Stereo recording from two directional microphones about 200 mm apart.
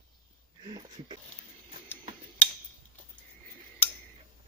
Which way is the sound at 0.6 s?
25° right (ahead or behind).